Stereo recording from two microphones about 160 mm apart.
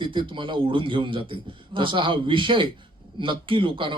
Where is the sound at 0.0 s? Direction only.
30° right (ahead or behind).